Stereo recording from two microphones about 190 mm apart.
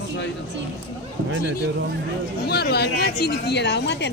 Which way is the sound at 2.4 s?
60° left (ahead or behind).